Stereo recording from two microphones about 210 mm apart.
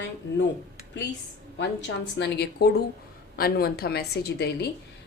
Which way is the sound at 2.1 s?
55° left (ahead or behind).